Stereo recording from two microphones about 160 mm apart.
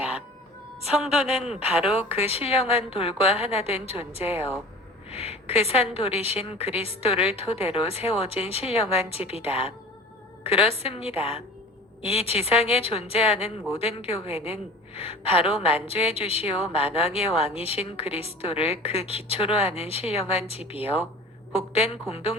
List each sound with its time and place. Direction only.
1.5 s speech: 5° right (ahead or behind)
2.0 s a woman's voice: 40° left (ahead or behind)